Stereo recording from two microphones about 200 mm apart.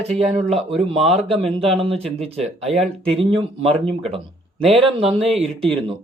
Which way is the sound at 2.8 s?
5° left (ahead or behind).